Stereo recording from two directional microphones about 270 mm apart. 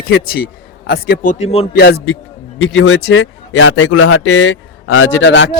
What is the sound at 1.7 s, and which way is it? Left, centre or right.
A man's voice, left.